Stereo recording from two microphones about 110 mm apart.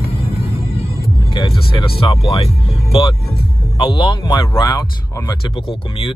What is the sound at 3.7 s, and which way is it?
Speech, 50° left (ahead or behind).